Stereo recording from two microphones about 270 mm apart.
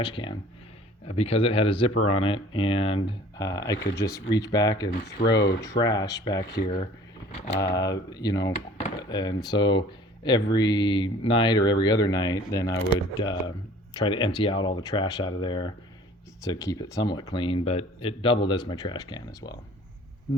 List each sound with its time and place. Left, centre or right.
0.0 s speech: centre